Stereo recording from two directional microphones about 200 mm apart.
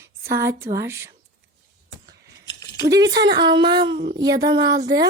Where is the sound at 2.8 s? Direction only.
15° right (ahead or behind).